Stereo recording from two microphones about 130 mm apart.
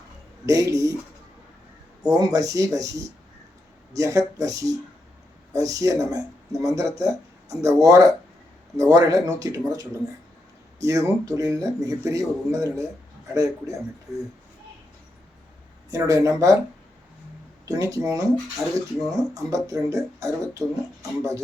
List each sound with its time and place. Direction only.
0.4 s speech: 25° right (ahead or behind)
2.0 s speech: 25° right (ahead or behind)
3.9 s speech: 25° right (ahead or behind)
14.1 s speech: centre (ahead or behind)
15.9 s speech: 25° right (ahead or behind)
17.7 s speech: 25° right (ahead or behind)